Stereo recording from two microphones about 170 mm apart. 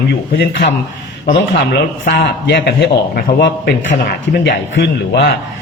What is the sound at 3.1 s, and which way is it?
A man's voice, 65° left (ahead or behind).